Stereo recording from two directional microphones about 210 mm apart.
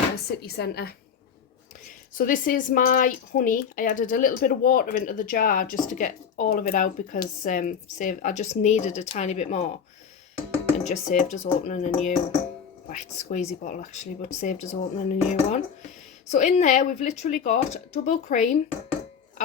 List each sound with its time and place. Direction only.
0.4 s a woman's voice: 50° left (ahead or behind)
2.1 s speech: 40° left (ahead or behind)
10.8 s speech: 35° left (ahead or behind)